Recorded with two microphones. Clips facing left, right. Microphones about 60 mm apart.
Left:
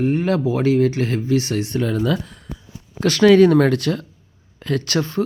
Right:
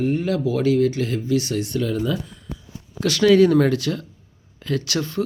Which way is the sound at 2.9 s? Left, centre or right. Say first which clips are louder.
Left 3 dB; left.